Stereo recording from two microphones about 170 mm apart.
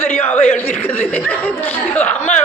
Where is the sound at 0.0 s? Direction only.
10° left (ahead or behind).